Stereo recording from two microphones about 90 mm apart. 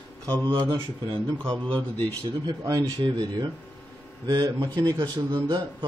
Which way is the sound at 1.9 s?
50° right (ahead or behind).